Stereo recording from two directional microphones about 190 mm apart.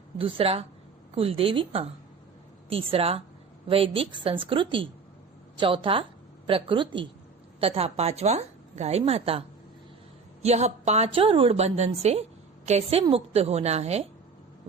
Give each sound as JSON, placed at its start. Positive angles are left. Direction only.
{"t": 0.2, "sound": "a woman's voice", "side_deg": -30}
{"t": 10.4, "sound": "a woman's voice", "side_deg": -35}